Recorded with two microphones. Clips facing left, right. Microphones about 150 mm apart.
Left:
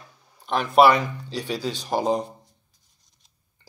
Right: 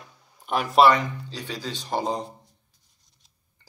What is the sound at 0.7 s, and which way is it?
Speech, 10° left (ahead or behind).